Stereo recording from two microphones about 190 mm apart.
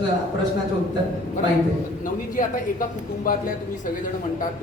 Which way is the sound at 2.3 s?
45° left (ahead or behind).